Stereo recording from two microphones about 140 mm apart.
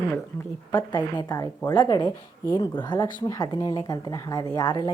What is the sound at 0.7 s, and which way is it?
Speech, 30° left (ahead or behind).